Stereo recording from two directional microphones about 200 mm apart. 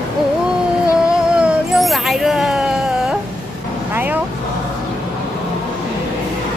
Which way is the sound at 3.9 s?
10° right (ahead or behind).